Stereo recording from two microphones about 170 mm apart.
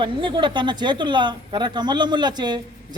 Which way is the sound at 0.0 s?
30° right (ahead or behind).